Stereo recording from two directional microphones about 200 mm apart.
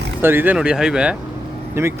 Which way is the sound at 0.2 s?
10° right (ahead or behind).